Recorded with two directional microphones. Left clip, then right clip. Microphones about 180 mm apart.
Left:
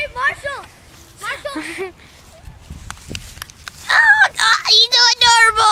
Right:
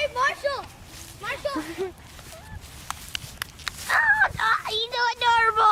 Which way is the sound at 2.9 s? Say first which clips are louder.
Left 2 dB; 15° right (ahead or behind).